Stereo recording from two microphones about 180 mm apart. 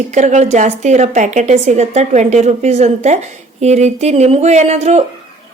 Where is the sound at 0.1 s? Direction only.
40° right (ahead or behind).